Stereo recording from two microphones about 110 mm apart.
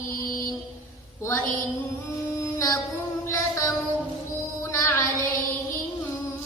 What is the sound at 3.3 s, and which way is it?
Child singing, 25° left (ahead or behind).